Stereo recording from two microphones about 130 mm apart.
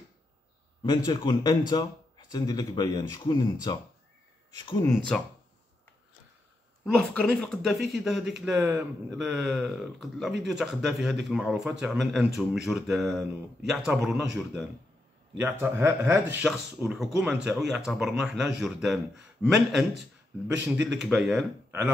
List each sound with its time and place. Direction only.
0.8 s a man's voice: 35° left (ahead or behind)
5.1 s speech: 5° left (ahead or behind)
6.9 s speech: 10° left (ahead or behind)
8.5 s speech: 25° right (ahead or behind)
9.1 s speech: centre (ahead or behind)
15.4 s speech: 20° right (ahead or behind)
16.4 s speech: 5° right (ahead or behind)